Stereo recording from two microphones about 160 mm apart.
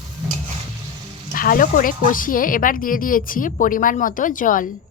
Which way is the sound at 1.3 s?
60° left (ahead or behind).